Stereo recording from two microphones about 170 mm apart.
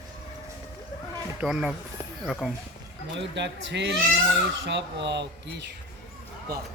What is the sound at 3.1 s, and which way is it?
Speech, 90° right.